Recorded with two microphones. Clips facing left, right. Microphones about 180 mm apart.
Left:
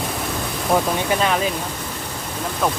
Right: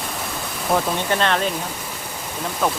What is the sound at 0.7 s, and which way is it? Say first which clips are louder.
Speech: left 1 dB; 5° left (ahead or behind).